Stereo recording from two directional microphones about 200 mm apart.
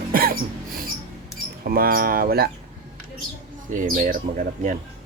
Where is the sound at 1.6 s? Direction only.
45° right (ahead or behind).